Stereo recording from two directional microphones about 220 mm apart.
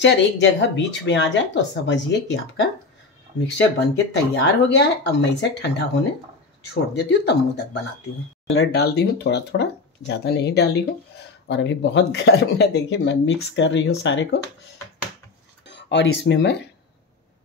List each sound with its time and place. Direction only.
0.0 s speech: 55° left (ahead or behind)
8.5 s speech: 65° left (ahead or behind)
8.8 s speech: 50° left (ahead or behind)
15.7 s speech: 55° left (ahead or behind)